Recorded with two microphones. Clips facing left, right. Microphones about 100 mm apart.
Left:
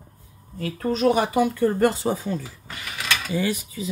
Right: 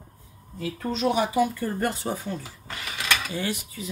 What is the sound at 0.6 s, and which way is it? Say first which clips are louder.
Speech: left 5 dB; 45° left (ahead or behind).